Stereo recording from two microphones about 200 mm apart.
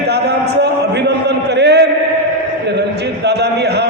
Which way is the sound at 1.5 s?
55° right (ahead or behind).